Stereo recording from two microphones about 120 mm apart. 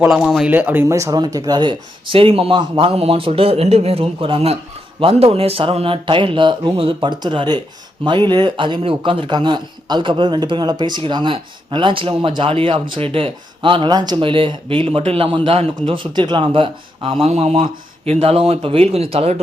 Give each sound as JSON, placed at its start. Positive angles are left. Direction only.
{"t": 0.1, "sound": "speech", "side_deg": -5}
{"t": 0.5, "sound": "a man's voice", "side_deg": -15}